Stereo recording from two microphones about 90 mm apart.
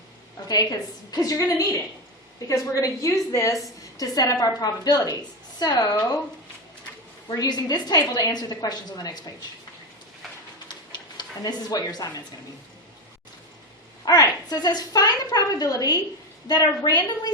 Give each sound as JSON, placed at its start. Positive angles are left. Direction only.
{"t": 0.4, "sound": "a woman's voice", "side_deg": 45}
{"t": 7.3, "sound": "a woman's voice", "side_deg": 50}
{"t": 11.2, "sound": "a woman's voice", "side_deg": 50}
{"t": 14.0, "sound": "a woman's voice", "side_deg": 50}